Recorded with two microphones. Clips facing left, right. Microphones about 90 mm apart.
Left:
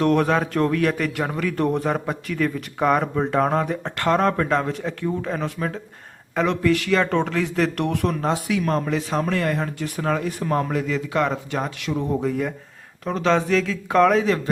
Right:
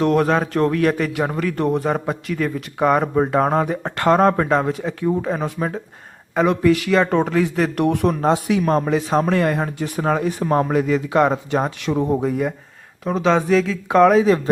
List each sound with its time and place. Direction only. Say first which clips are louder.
0.0 s speech: right 2 dB; 5° right (ahead or behind); by 4.4 s 20° right (ahead or behind)
4.4 s speech: right 3 dB; 10° right (ahead or behind)
8.3 s speech: right 6 dB; 30° right (ahead or behind)
12.0 s speech: right 1 dB; 15° right (ahead or behind)
13.1 s speech: right 3 dB; 5° right (ahead or behind)